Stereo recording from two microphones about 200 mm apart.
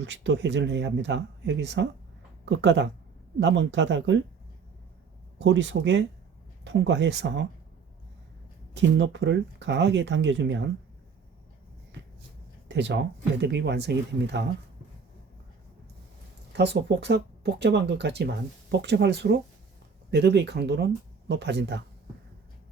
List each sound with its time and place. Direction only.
0.0 s speech: 60° right (ahead or behind)
5.4 s speech: 60° right (ahead or behind)
8.7 s speech: 65° right (ahead or behind)
11.9 s shuffle: 60° right (ahead or behind)
12.6 s speech: 60° right (ahead or behind)
16.5 s speech: 55° right (ahead or behind)